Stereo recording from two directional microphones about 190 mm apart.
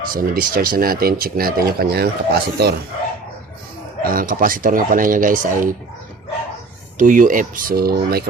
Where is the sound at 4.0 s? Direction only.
45° right (ahead or behind).